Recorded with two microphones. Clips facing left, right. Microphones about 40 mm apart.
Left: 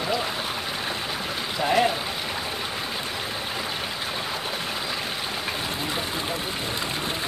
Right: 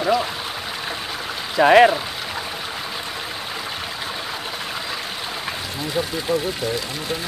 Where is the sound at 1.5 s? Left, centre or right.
Right.